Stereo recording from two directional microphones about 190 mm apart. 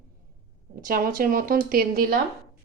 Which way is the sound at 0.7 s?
50° right (ahead or behind).